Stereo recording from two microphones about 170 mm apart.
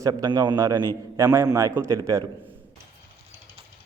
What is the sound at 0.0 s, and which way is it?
A man's voice, 25° right (ahead or behind).